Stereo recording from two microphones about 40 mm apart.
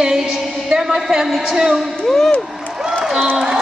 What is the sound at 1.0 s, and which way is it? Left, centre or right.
Speech, centre.